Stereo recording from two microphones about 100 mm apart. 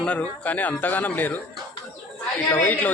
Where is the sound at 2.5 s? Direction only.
15° left (ahead or behind).